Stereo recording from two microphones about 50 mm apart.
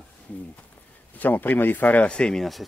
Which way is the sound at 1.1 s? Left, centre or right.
Left.